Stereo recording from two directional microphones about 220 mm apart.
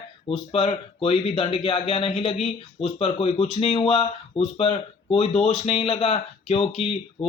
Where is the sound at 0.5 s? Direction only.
25° left (ahead or behind).